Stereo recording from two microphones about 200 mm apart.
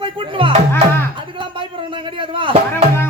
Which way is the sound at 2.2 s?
25° right (ahead or behind).